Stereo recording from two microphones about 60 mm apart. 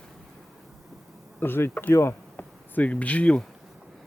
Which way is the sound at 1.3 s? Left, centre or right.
Left.